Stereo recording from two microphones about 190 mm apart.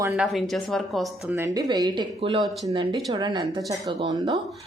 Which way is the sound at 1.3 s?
15° right (ahead or behind).